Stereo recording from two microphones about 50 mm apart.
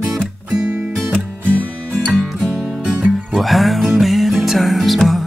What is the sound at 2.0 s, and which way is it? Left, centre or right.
Music, right.